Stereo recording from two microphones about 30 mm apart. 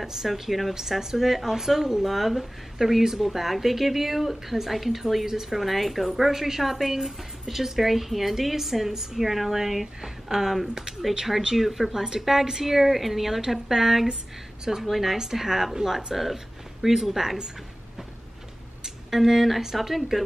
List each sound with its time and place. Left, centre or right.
0.0 s speech: centre
3.2 s speech: centre
5.6 s speech: centre
10.9 s a sound: right
11.5 s speech: centre
19.0 s speech: centre